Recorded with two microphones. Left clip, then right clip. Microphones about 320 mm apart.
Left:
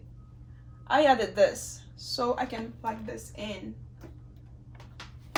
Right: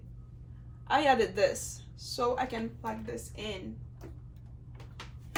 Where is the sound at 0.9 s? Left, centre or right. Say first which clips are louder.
Left 3 dB; centre.